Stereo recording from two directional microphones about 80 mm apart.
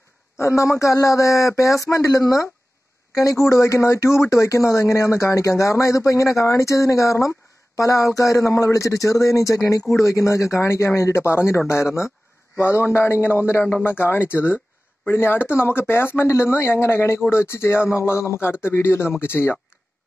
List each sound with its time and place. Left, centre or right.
0.4 s a man's voice: left